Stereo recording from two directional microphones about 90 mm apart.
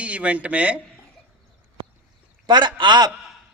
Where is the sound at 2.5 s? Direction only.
55° right (ahead or behind).